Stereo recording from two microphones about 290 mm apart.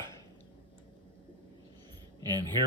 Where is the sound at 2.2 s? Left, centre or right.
Centre.